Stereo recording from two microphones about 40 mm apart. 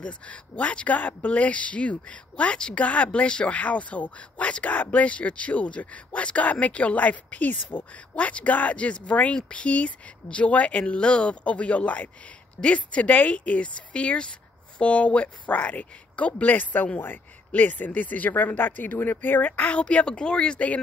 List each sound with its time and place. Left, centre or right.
0.0 s speech: left
16.5 s speech: left
19.8 s speech: left